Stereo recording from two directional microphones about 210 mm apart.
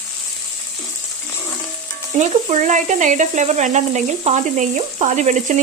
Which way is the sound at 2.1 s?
35° right (ahead or behind).